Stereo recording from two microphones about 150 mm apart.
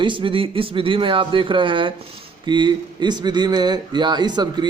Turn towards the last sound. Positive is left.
turn(degrees=-30)  # may be behind; listen again after turning